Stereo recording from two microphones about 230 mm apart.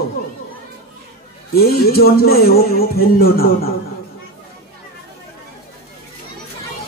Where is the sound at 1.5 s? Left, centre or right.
Left.